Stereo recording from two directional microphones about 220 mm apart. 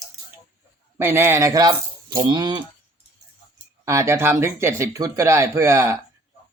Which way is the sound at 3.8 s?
15° right (ahead or behind).